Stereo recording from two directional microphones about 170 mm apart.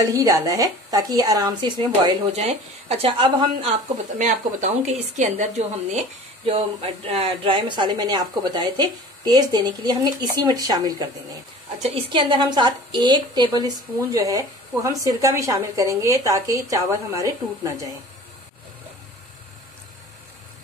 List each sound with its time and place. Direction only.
0.0 s a woman's voice: 20° right (ahead or behind)
2.3 s speech: 40° right (ahead or behind)
4.2 s a woman's voice: 45° right (ahead or behind); by 17.8 s 20° right (ahead or behind)